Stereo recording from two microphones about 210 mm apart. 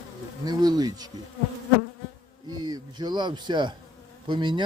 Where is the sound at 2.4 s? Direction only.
20° right (ahead or behind).